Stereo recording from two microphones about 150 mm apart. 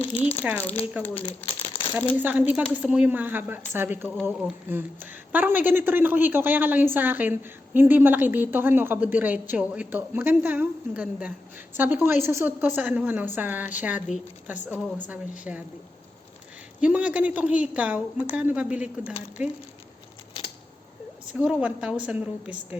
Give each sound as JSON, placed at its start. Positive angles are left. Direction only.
{"t": 0.0, "sound": "speech", "side_deg": 40}
{"t": 1.0, "sound": "a woman's voice", "side_deg": -10}
{"t": 1.5, "sound": "crumpling", "side_deg": 35}
{"t": 2.1, "sound": "a woman's voice", "side_deg": -10}
{"t": 16.8, "sound": "a woman's voice", "side_deg": -10}
{"t": 21.3, "sound": "a woman's voice", "side_deg": -5}